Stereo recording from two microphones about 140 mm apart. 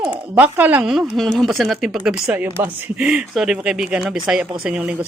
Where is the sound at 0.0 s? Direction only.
10° right (ahead or behind).